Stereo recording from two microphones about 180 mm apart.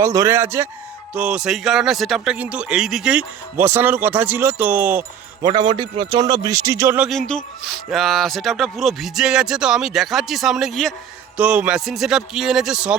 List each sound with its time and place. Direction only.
0.0 s a man's voice: 15° right (ahead or behind)
5.4 s a man's voice: 25° right (ahead or behind)
7.1 s speech: 5° left (ahead or behind)